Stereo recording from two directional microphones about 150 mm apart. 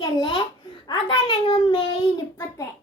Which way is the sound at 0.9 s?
35° left (ahead or behind).